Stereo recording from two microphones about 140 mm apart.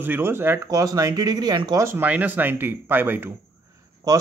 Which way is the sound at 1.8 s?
15° right (ahead or behind).